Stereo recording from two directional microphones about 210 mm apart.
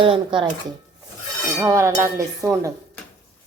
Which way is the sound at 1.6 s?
15° right (ahead or behind).